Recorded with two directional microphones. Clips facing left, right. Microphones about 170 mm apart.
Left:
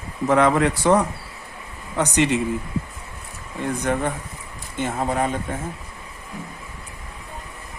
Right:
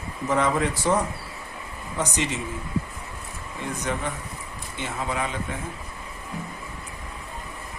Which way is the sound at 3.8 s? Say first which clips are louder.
Left 5 dB; 55° left (ahead or behind).